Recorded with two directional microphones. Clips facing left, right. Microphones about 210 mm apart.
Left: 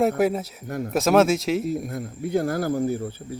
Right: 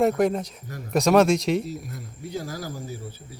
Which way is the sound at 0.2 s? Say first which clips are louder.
Even; 5° left (ahead or behind).